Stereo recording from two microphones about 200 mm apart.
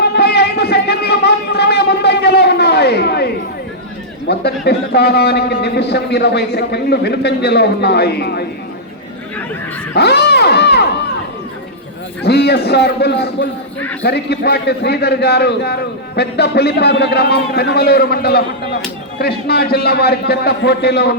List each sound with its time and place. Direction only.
0.0 s music: 55° left (ahead or behind)
4.3 s a man's voice: 55° left (ahead or behind)
9.9 s a sound: 55° left (ahead or behind)
12.2 s a man's voice: 55° left (ahead or behind)